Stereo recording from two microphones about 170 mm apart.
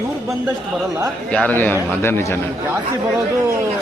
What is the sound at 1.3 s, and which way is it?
Speech, 10° left (ahead or behind).